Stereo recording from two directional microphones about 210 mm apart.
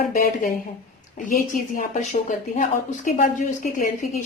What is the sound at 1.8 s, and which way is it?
A woman's voice, 40° left (ahead or behind).